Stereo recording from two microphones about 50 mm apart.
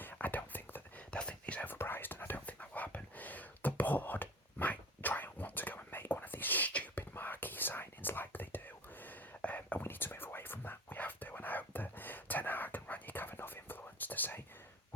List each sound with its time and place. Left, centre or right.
0.0 s whispering: left
1.1 s whispering: left
1.6 s whispering: left
7.0 s whispering: left
9.8 s whispering: left